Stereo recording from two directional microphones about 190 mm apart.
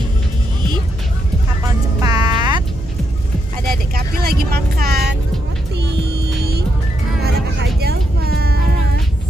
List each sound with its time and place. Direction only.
2.0 s music: 20° right (ahead or behind)
3.9 s vehicle: 55° right (ahead or behind)
7.2 s vehicle: 55° right (ahead or behind)